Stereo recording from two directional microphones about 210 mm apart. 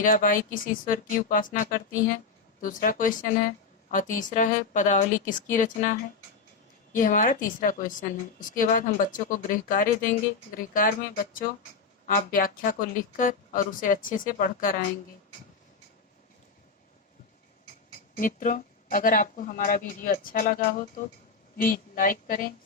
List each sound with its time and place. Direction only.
0.0 s a woman's voice: 40° left (ahead or behind)
18.2 s a woman's voice: 40° left (ahead or behind)